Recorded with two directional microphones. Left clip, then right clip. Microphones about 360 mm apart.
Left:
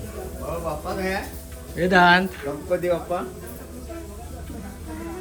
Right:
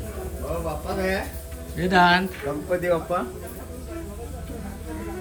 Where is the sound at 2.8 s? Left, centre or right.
Right.